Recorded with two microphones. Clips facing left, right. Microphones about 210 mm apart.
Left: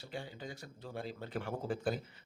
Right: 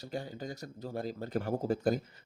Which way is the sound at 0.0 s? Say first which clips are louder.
Right 5 dB; 40° right (ahead or behind).